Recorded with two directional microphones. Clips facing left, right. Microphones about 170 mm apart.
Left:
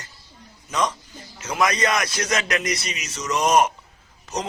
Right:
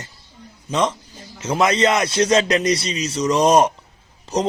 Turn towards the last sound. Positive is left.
turn(degrees=-30)  # may be behind; listen again after turning